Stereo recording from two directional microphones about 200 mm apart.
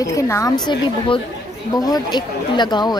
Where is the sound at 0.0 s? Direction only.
15° left (ahead or behind).